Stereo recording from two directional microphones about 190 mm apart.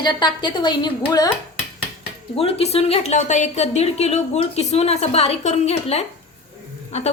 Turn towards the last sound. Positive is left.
turn(degrees=35)  # may be behind; listen again after turning